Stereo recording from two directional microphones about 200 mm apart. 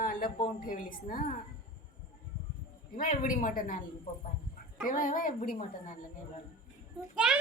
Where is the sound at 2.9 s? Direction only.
40° left (ahead or behind).